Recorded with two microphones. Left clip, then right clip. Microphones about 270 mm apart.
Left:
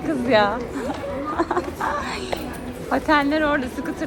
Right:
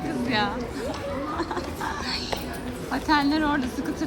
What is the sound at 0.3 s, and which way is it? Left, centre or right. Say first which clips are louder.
A woman's voice: left 9 dB; centre.